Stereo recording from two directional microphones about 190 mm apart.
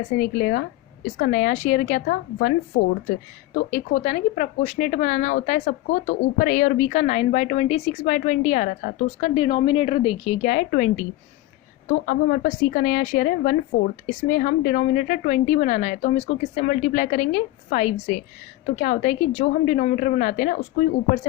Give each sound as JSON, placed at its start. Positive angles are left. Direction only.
{"t": 0.2, "sound": "a woman's voice", "side_deg": 50}
{"t": 3.7, "sound": "speech", "side_deg": 40}
{"t": 12.0, "sound": "a woman's voice", "side_deg": 45}